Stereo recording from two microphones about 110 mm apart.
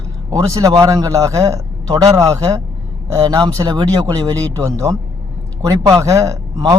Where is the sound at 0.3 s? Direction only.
35° right (ahead or behind).